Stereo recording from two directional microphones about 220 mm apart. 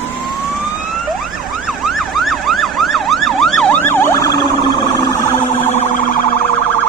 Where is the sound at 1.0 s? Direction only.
Centre (ahead or behind).